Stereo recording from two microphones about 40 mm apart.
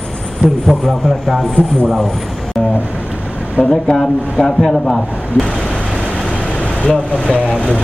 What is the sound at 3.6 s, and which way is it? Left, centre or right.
Speech, centre.